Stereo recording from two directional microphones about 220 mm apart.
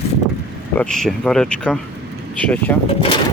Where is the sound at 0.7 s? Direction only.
Centre (ahead or behind).